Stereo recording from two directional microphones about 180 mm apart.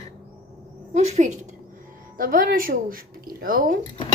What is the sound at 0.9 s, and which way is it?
Speech, 40° right (ahead or behind).